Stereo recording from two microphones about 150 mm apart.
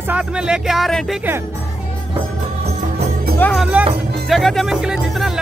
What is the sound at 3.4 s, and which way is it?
Speech, 5° left (ahead or behind).